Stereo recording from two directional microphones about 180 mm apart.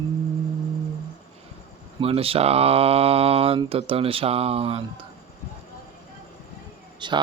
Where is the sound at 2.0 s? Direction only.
30° right (ahead or behind).